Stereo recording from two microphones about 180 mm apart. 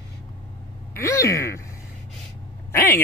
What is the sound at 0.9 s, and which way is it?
Speech, 15° left (ahead or behind).